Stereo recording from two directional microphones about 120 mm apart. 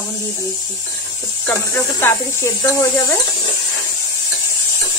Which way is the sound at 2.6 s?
30° left (ahead or behind).